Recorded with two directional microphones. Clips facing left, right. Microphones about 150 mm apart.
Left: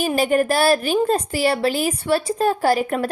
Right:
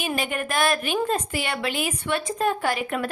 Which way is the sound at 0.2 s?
35° left (ahead or behind).